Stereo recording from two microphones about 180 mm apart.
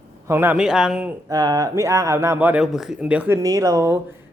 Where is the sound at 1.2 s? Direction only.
20° right (ahead or behind).